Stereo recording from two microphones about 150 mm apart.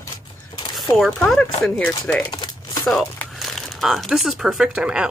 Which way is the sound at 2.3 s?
25° left (ahead or behind).